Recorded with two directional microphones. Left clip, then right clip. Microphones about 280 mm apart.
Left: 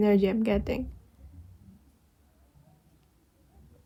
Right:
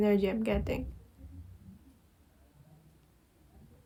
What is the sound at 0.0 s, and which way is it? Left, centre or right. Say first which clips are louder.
Speech: left 4 dB; left.